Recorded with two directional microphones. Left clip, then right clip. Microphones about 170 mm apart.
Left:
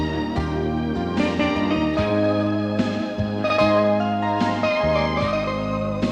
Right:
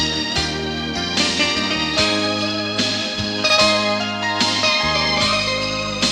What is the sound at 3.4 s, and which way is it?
Music, 20° right (ahead or behind).